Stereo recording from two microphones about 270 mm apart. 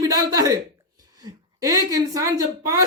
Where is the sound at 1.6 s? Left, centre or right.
Centre.